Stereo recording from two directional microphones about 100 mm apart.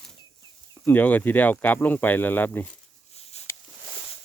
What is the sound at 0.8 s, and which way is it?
Speech, 20° left (ahead or behind).